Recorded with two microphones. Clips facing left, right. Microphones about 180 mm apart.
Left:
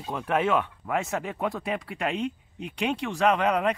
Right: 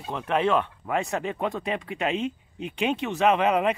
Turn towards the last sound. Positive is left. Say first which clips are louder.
# right 2 dB
turn(degrees=-5)  # may be behind; listen again after turning